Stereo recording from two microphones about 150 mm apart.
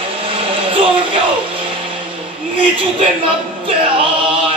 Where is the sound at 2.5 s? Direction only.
35° right (ahead or behind).